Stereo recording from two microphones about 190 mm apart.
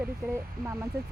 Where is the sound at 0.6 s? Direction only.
50° right (ahead or behind).